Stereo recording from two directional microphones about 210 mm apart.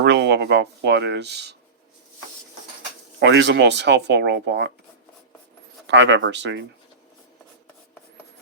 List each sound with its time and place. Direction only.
0.0 s speech: 55° right (ahead or behind)
3.2 s speech: 55° right (ahead or behind)
5.9 s speech: 55° right (ahead or behind)